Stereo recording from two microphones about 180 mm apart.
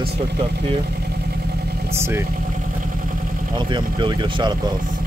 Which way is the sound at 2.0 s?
15° right (ahead or behind).